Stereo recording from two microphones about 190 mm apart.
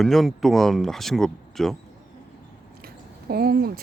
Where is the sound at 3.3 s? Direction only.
55° right (ahead or behind).